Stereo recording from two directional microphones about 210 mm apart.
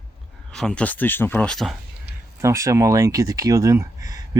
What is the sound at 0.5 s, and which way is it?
Speech, centre (ahead or behind).